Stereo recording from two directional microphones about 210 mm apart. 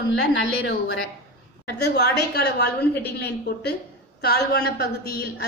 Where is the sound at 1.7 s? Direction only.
50° left (ahead or behind).